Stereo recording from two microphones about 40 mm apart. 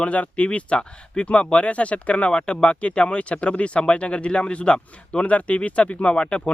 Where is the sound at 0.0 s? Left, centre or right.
Left.